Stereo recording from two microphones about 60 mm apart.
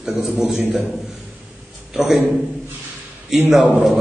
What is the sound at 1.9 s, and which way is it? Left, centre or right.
Speech, centre.